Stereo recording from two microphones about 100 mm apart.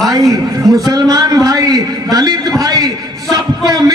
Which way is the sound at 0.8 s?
40° right (ahead or behind).